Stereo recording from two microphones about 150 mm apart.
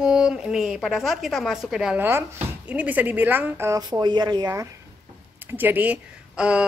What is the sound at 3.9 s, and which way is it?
Speech, 30° right (ahead or behind).